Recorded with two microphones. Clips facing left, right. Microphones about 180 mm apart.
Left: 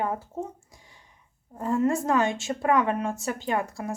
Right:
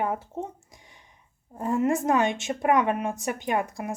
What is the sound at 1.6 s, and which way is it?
A woman's voice, 15° right (ahead or behind).